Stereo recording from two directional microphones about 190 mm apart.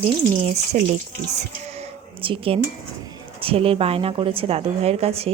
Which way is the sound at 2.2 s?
30° right (ahead or behind).